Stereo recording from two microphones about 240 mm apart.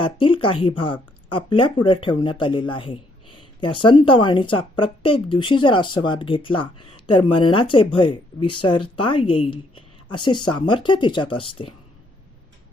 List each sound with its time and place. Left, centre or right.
0.0 s speech: left